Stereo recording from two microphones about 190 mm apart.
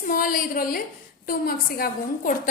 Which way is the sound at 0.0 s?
50° left (ahead or behind).